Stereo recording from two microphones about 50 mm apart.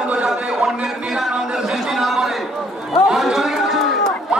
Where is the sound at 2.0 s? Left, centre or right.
Centre.